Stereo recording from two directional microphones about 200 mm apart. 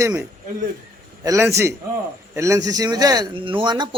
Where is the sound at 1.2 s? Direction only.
15° right (ahead or behind).